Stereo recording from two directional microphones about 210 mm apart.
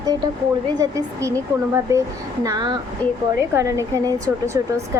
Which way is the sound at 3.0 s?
5° left (ahead or behind).